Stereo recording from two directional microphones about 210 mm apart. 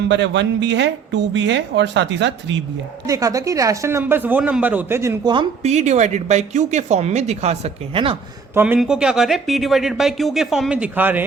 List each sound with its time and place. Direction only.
0.1 s speech: 60° right (ahead or behind)
3.1 s speech: 15° right (ahead or behind)
8.5 s speech: 5° right (ahead or behind)